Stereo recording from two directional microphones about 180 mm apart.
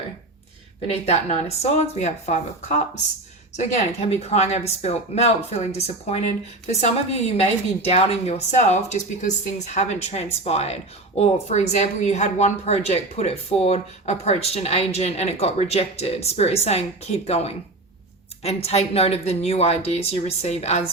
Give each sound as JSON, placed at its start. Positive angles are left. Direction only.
{"t": 1.0, "sound": "speech", "side_deg": 35}
{"t": 4.1, "sound": "speech", "side_deg": 35}